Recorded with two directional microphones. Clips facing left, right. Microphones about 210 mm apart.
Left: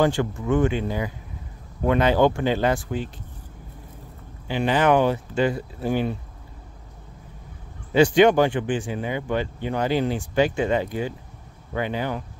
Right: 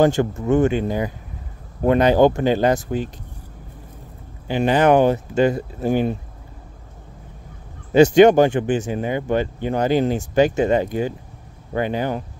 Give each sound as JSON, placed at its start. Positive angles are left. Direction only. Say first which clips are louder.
{"t": 0.0, "sound": "speech", "louder": "right 4 dB", "side_deg": -45}
{"t": 4.5, "sound": "speech", "louder": "right 4 dB", "side_deg": -45}
{"t": 7.9, "sound": "speech", "louder": "right 5 dB", "side_deg": -45}